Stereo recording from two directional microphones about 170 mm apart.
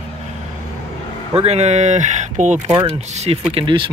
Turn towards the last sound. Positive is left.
turn(degrees=-30)  # may be behind; listen again after turning